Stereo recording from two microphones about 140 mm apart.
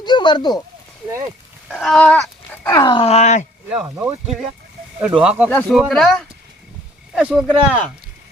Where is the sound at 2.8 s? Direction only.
40° left (ahead or behind); by 3.4 s 55° left (ahead or behind).